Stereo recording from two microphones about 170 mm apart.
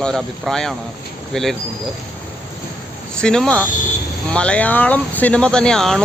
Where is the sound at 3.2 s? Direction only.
5° left (ahead or behind).